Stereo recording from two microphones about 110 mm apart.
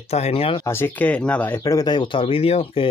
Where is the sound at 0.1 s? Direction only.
70° left (ahead or behind).